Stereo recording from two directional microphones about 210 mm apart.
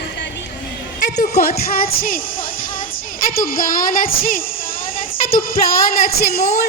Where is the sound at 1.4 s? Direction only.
45° left (ahead or behind).